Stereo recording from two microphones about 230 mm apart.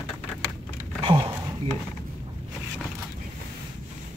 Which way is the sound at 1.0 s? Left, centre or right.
Right.